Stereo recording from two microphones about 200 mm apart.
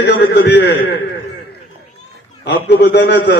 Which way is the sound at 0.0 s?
60° left (ahead or behind).